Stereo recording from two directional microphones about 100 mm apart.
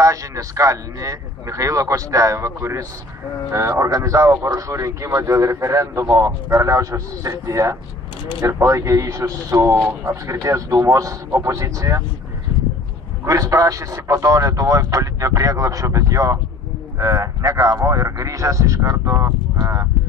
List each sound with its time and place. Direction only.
0.0 s speech: 35° right (ahead or behind)
13.2 s speech: 35° right (ahead or behind)